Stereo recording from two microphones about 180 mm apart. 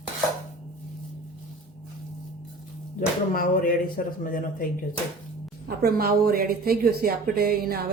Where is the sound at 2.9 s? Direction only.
50° left (ahead or behind).